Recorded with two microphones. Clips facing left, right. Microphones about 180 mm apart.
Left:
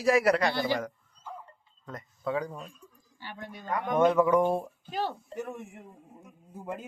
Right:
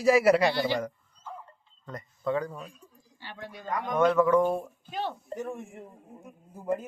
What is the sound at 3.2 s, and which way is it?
Speech, 50° left (ahead or behind).